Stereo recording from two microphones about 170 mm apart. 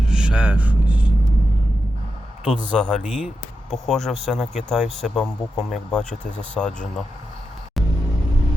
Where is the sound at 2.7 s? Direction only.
Centre (ahead or behind).